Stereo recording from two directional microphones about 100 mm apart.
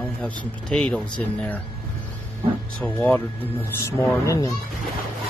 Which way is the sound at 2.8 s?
15° left (ahead or behind).